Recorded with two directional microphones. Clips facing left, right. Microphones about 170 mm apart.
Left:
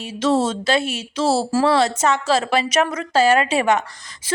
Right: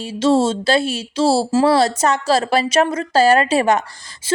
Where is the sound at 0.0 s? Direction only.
30° right (ahead or behind).